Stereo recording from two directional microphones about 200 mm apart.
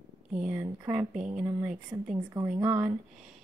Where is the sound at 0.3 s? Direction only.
5° right (ahead or behind).